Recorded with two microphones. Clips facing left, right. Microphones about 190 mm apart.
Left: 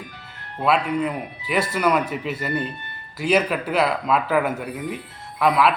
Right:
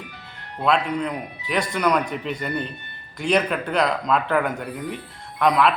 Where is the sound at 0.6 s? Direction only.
5° left (ahead or behind).